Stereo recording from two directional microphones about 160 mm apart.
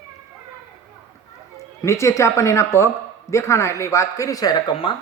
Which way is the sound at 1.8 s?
20° left (ahead or behind).